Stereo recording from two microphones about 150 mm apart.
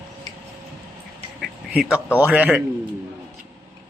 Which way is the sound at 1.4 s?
5° right (ahead or behind).